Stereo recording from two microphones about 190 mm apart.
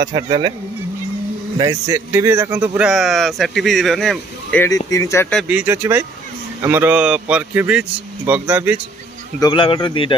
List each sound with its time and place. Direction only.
0.0 s speech: 25° right (ahead or behind)
1.6 s speech: 20° right (ahead or behind); by 4.6 s 5° left (ahead or behind)
4.6 s speech: 20° left (ahead or behind)
5.3 s speech: centre (ahead or behind)
5.6 s speech: 10° right (ahead or behind)
9.4 s speech: 25° left (ahead or behind)